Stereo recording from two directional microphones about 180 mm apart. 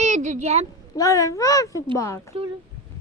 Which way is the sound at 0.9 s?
20° left (ahead or behind).